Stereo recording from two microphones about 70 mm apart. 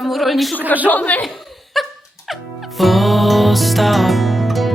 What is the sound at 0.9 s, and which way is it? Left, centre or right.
Speech, left.